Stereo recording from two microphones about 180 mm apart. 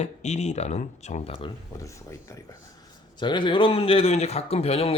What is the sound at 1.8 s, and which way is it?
Speech, 15° left (ahead or behind).